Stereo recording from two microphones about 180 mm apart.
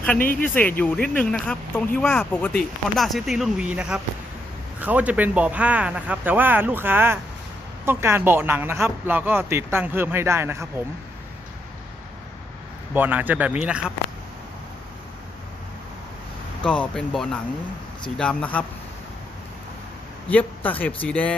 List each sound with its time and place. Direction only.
0.2 s speech: 50° left (ahead or behind)
0.4 s speech: 10° left (ahead or behind); by 10.8 s 15° right (ahead or behind)
12.9 s speech: 10° right (ahead or behind)
16.6 s speech: 5° left (ahead or behind)
20.3 s speech: 10° left (ahead or behind)